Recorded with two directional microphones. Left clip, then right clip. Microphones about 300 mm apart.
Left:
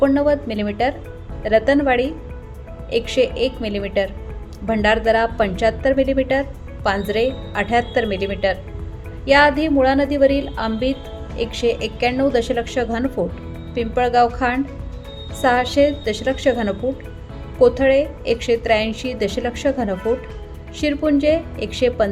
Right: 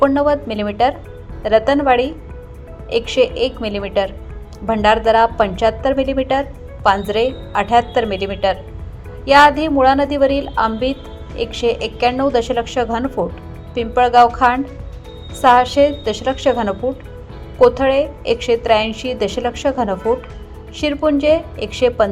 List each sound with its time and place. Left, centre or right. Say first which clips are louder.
0.0 s a woman's voice: right 2 dB; centre